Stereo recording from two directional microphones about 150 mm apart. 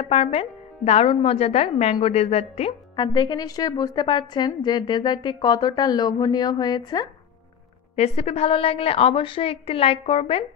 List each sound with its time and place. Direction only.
0.0 s a woman's voice: 40° left (ahead or behind)
3.0 s a woman's voice: 30° left (ahead or behind)
8.0 s a woman's voice: 45° left (ahead or behind)